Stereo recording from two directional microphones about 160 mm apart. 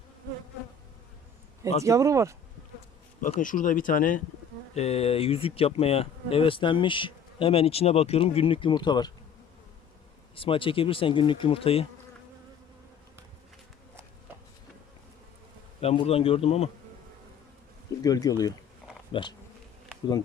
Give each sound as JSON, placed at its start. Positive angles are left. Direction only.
{"t": 1.8, "sound": "speech", "side_deg": -20}
{"t": 3.4, "sound": "speech", "side_deg": 55}
{"t": 4.7, "sound": "speech", "side_deg": 40}
{"t": 10.3, "sound": "speech", "side_deg": 35}
{"t": 15.8, "sound": "speech", "side_deg": 40}
{"t": 18.0, "sound": "speech", "side_deg": 25}